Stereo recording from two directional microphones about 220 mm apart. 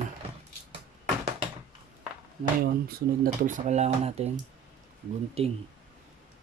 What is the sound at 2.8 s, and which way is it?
Speech, 40° right (ahead or behind).